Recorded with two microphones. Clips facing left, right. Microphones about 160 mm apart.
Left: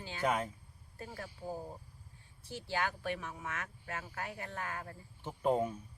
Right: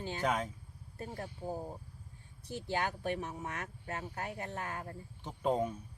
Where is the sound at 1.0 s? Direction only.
25° right (ahead or behind).